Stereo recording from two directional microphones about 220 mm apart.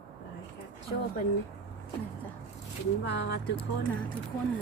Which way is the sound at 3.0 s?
50° left (ahead or behind).